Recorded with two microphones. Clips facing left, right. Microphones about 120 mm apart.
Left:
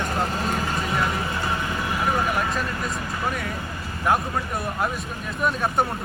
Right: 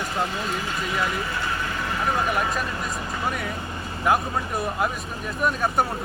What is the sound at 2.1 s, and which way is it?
Speech, centre (ahead or behind).